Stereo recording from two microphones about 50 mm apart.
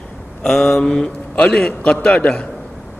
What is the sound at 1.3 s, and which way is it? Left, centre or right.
A man's voice, centre.